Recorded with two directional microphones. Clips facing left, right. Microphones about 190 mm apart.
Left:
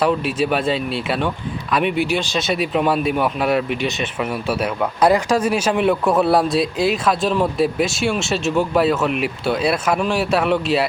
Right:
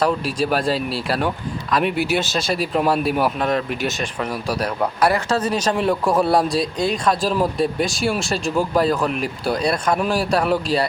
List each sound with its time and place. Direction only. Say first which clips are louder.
0.0 s a man's voice: left 2 dB; 5° left (ahead or behind)
4.9 s a man's voice: left 4 dB; 15° left (ahead or behind); by 10.8 s centre (ahead or behind)